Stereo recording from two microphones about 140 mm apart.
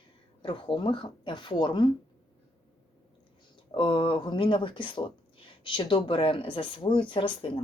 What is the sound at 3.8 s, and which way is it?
Speech, 35° left (ahead or behind).